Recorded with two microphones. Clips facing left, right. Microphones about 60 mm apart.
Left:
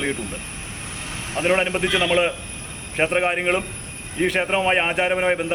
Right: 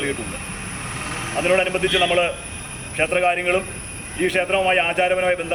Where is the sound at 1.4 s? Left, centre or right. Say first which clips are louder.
Right 1 dB; centre.